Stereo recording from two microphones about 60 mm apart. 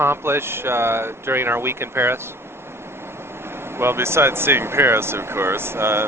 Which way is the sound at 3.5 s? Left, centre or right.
Right.